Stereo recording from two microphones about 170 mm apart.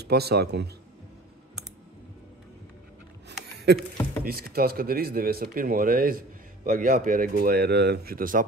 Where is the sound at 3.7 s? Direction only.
75° right (ahead or behind).